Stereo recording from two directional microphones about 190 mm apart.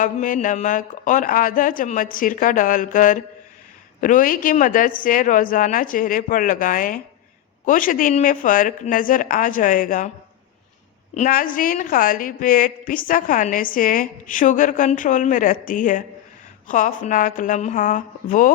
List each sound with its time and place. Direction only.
0.0 s a woman's voice: 45° left (ahead or behind)
11.1 s a woman's voice: 45° left (ahead or behind)